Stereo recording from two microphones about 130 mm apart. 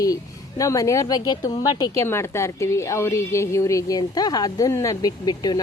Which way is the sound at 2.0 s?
20° left (ahead or behind).